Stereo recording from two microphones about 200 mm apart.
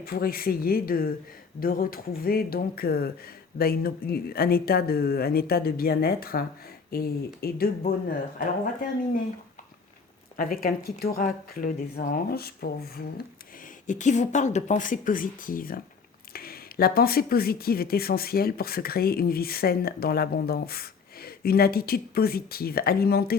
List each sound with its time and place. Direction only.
0.0 s speech: 50° left (ahead or behind)
10.3 s speech: 45° left (ahead or behind)
13.8 s speech: 40° left (ahead or behind)